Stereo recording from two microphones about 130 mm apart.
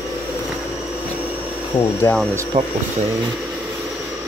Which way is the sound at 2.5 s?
60° right (ahead or behind).